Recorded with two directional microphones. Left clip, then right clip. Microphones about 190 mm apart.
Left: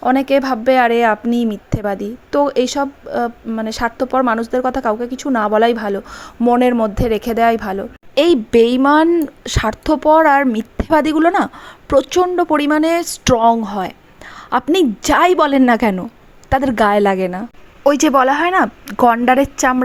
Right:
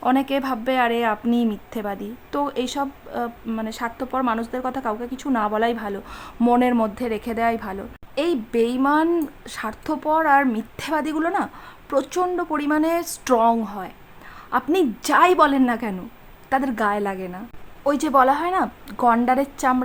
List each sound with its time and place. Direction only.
0.0 s a woman's voice: 25° left (ahead or behind); by 17.4 s 40° left (ahead or behind)
17.8 s a woman's voice: 25° left (ahead or behind)